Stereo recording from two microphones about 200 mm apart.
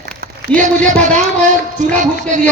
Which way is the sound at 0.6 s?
40° right (ahead or behind).